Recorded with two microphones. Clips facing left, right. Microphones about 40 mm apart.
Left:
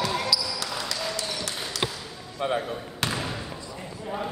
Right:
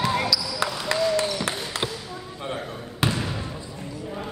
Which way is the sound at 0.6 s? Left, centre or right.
Right.